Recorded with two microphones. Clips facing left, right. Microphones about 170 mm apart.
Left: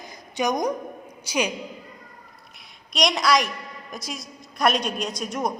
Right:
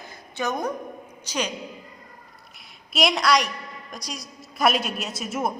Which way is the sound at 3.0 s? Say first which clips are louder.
Even; centre (ahead or behind).